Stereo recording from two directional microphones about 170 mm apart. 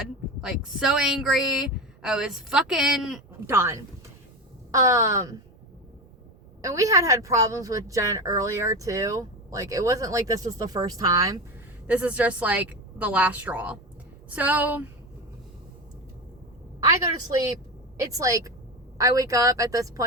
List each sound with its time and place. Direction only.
0.4 s a woman's voice: 5° right (ahead or behind)
6.6 s a woman's voice: 20° right (ahead or behind)
11.9 s a woman's voice: 10° right (ahead or behind)
18.1 s a woman's voice: 20° right (ahead or behind)